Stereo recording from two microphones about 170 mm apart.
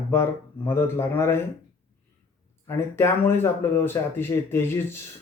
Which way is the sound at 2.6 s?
15° left (ahead or behind).